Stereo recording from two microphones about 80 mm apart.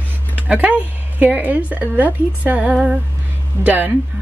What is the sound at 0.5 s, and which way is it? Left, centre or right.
Speech, centre.